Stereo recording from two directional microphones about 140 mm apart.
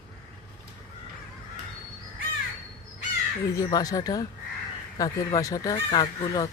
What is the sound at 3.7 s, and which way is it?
Speech, 25° left (ahead or behind).